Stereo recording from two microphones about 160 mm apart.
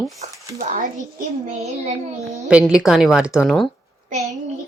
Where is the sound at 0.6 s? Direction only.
60° right (ahead or behind).